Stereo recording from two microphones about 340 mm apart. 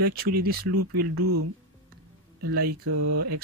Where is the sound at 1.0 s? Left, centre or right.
Right.